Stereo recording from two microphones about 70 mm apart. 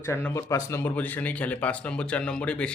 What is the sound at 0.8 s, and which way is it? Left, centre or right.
Speech, left.